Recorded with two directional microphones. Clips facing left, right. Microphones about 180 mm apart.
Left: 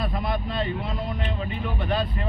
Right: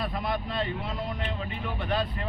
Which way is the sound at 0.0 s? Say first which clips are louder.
Left 3 dB; 25° left (ahead or behind).